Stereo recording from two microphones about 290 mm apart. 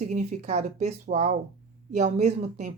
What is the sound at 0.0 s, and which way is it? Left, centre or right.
A woman's voice, right.